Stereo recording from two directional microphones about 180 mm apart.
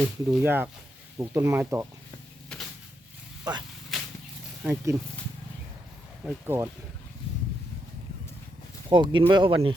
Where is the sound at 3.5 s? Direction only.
25° right (ahead or behind).